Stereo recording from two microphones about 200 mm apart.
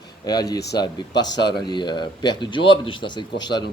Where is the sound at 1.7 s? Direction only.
20° left (ahead or behind).